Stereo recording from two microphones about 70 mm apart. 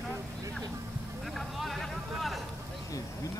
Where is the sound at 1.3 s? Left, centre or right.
Centre.